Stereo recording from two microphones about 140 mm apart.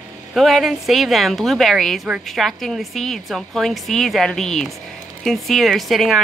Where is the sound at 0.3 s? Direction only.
Centre (ahead or behind).